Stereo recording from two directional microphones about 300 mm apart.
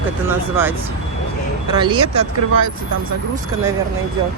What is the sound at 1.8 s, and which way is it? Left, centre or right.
Speech, centre.